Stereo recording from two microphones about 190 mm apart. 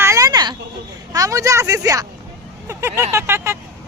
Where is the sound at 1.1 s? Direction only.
20° right (ahead or behind).